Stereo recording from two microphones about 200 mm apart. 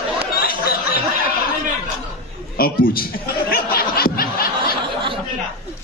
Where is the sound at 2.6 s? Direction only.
45° left (ahead or behind).